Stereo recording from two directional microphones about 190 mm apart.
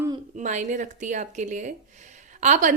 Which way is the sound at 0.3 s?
40° right (ahead or behind).